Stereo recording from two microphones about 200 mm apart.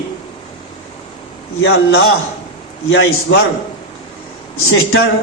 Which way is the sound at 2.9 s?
70° left (ahead or behind).